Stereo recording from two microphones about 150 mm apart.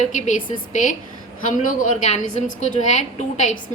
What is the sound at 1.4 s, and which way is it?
A woman's voice, 60° left (ahead or behind).